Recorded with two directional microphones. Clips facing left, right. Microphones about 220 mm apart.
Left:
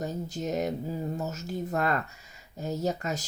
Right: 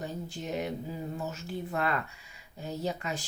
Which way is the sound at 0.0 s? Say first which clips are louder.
Left 5 dB; 40° left (ahead or behind).